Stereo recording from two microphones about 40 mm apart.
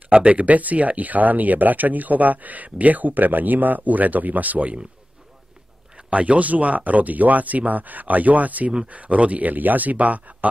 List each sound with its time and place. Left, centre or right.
0.1 s speech: right
5.9 s speech: right